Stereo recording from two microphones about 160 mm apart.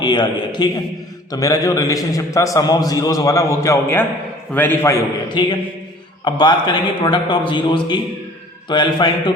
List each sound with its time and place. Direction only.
0.0 s a man's voice: 30° left (ahead or behind)
5.3 s a man's voice: 30° left (ahead or behind)